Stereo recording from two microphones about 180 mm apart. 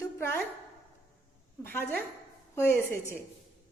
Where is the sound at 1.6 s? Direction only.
10° left (ahead or behind).